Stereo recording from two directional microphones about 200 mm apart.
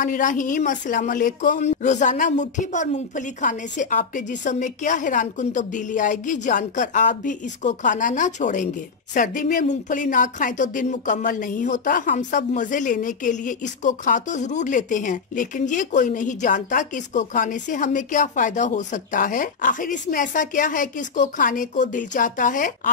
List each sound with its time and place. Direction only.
0.0 s speech: 40° left (ahead or behind)